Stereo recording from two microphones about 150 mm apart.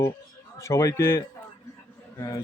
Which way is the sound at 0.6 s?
20° left (ahead or behind).